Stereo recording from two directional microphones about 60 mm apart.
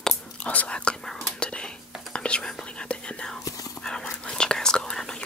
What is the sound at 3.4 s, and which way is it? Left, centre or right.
Whispering, left.